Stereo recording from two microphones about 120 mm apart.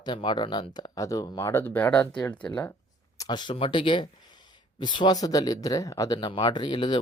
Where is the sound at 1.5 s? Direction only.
20° left (ahead or behind).